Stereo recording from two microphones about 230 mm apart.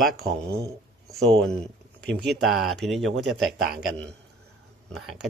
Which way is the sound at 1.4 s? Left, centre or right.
Centre.